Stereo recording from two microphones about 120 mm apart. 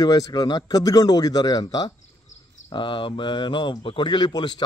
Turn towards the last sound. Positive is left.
turn(degrees=35)  # may be behind; listen again after turning